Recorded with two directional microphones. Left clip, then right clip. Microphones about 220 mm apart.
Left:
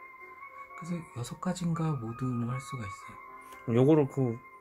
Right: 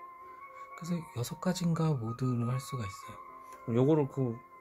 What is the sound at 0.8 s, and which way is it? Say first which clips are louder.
Speech: right 2 dB; 50° right (ahead or behind).